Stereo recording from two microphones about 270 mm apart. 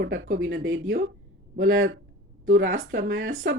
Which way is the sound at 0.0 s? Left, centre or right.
Right.